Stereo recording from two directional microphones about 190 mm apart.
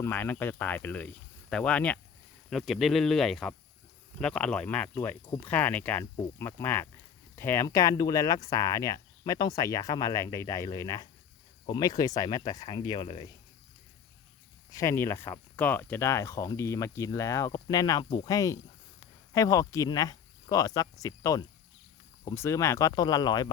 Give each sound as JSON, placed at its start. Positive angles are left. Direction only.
{"t": 0.0, "sound": "speech", "side_deg": 10}
{"t": 14.7, "sound": "speech", "side_deg": 15}